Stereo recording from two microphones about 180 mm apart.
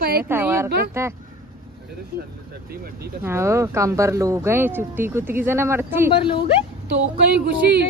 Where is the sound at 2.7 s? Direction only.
55° right (ahead or behind).